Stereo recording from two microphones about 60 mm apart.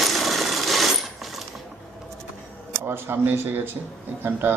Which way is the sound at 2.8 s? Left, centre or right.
Right.